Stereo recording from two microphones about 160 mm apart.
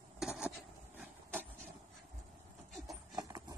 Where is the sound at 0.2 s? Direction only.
5° right (ahead or behind).